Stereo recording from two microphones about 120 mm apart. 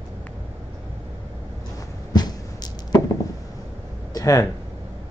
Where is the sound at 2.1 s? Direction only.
35° left (ahead or behind).